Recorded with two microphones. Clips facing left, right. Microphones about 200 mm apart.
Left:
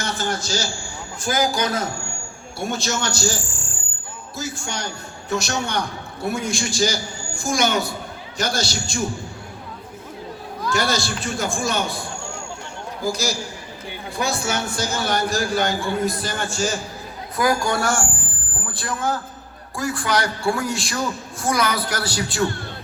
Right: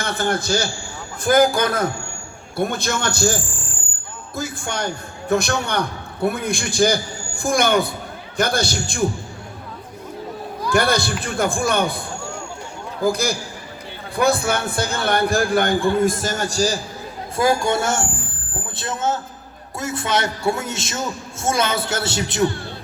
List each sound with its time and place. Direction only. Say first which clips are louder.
0.0 s a man's voice: right 4 dB; 55° right (ahead or behind)
10.7 s a man's voice: right 4 dB; 55° right (ahead or behind); by 16.8 s 35° right (ahead or behind)
17.3 s a man's voice: right 2 dB; 25° right (ahead or behind)